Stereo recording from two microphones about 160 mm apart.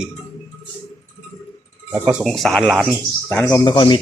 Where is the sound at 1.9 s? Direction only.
10° right (ahead or behind); by 3.6 s 10° left (ahead or behind).